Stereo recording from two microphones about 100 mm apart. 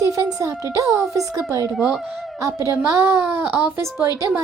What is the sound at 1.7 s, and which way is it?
Speech, 10° right (ahead or behind).